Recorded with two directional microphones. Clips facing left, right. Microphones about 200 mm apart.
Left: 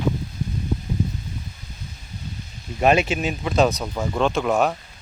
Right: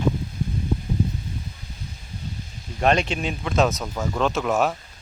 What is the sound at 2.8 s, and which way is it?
A man's voice, 5° left (ahead or behind).